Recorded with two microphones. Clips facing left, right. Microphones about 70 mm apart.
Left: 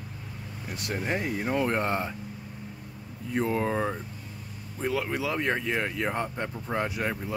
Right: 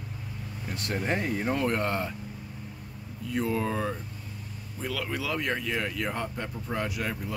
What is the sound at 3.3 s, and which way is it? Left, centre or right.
Speech, left.